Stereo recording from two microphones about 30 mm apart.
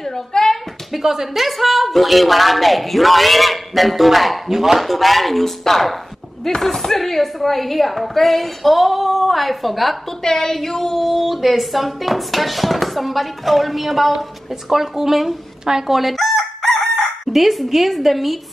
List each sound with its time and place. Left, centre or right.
0.0 s a sound: centre
1.0 s speech: centre
10.2 s speech: centre
14.7 s speech: centre
15.9 s speech: centre
16.3 s chicken: centre
17.3 s speech: centre